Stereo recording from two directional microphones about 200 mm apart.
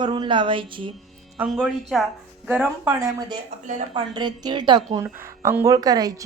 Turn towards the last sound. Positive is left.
turn(degrees=-20)  # may be behind; listen again after turning